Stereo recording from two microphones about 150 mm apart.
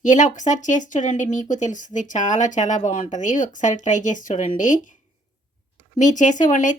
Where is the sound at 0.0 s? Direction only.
60° left (ahead or behind).